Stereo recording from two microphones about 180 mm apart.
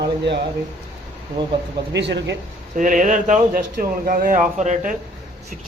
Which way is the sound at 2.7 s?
45° right (ahead or behind).